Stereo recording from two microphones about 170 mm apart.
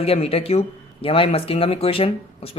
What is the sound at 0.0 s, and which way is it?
Speech, 35° left (ahead or behind).